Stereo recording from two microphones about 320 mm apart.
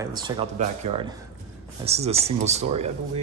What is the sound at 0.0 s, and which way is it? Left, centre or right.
Speech, centre.